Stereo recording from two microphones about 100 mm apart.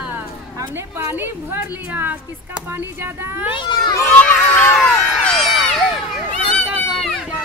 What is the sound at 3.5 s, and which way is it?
Cat, 50° left (ahead or behind).